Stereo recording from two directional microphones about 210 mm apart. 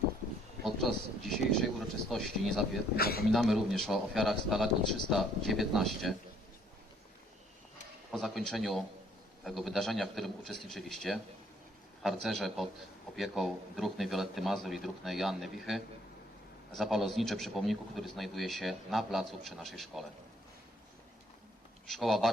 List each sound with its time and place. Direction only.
0.6 s a man's voice: centre (ahead or behind)
2.9 s a man's voice: 45° left (ahead or behind)
3.3 s a man's voice: centre (ahead or behind)
8.1 s a man's voice: centre (ahead or behind)
21.8 s a man's voice: centre (ahead or behind)